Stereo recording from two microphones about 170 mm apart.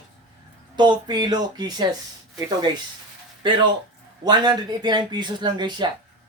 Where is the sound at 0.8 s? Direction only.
25° right (ahead or behind).